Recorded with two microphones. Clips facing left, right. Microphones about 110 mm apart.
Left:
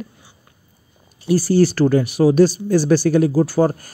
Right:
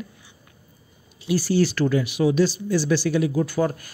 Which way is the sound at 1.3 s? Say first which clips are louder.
Left 6 dB; 40° left (ahead or behind).